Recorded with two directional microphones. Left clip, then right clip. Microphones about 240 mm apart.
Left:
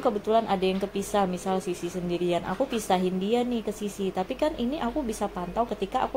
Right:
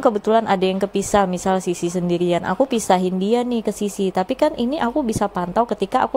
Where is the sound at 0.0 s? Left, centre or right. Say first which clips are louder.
Right 7 dB; right.